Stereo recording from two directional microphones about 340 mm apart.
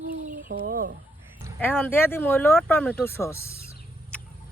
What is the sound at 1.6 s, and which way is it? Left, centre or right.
Speech, centre.